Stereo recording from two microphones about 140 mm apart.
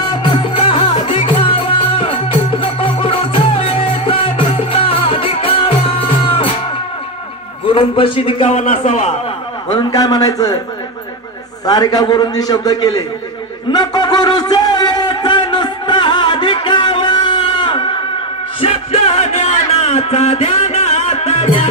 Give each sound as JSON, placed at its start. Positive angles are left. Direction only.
{"t": 0.1, "sound": "music", "side_deg": 35}
{"t": 7.6, "sound": "a man's voice", "side_deg": 40}
{"t": 8.5, "sound": "a man's voice", "side_deg": 65}
{"t": 9.7, "sound": "a man's voice", "side_deg": 30}
{"t": 11.6, "sound": "a man's voice", "side_deg": 30}
{"t": 13.7, "sound": "a sound", "side_deg": 30}
{"t": 18.6, "sound": "music", "side_deg": 45}